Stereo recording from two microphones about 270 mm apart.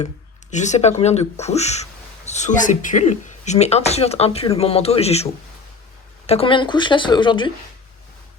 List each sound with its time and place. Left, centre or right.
0.5 s a woman's voice: left